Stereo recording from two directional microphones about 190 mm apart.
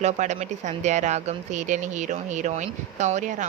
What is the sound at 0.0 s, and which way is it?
Speech, 40° right (ahead or behind).